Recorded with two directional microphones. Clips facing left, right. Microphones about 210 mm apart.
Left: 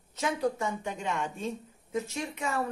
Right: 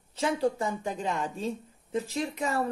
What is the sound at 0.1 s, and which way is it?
Speech, 30° right (ahead or behind).